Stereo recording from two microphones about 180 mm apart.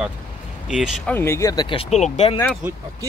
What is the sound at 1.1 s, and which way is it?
Speech, 15° left (ahead or behind).